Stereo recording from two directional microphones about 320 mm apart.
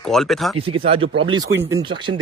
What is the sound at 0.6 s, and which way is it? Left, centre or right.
Speech, centre.